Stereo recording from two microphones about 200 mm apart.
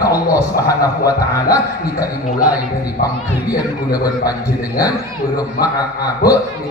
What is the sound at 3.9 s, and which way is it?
A man's voice, 20° left (ahead or behind).